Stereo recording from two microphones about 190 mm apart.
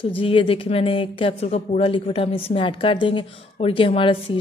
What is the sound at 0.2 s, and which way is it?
A woman's voice, 30° left (ahead or behind).